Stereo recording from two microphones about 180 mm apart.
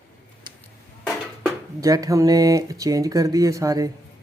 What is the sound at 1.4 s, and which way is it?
Speech, 20° right (ahead or behind).